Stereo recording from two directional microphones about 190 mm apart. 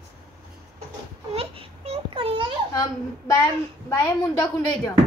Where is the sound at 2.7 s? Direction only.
20° left (ahead or behind).